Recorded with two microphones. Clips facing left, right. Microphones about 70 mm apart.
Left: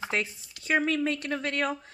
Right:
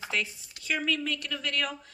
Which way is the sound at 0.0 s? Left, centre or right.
Left.